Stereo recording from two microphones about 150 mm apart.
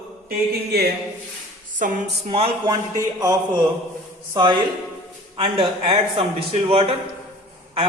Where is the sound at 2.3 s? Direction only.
40° right (ahead or behind).